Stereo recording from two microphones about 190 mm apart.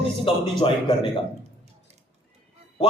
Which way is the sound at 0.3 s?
30° left (ahead or behind).